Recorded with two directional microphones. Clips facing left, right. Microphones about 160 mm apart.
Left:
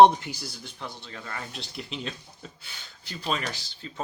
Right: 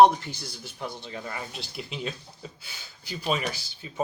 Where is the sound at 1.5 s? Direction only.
5° right (ahead or behind).